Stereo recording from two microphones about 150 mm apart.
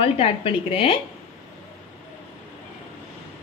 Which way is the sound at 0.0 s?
40° left (ahead or behind).